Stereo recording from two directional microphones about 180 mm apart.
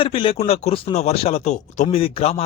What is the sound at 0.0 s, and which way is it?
A man's voice, 30° left (ahead or behind).